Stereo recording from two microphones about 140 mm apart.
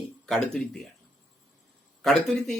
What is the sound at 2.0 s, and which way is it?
Speech, 5° left (ahead or behind).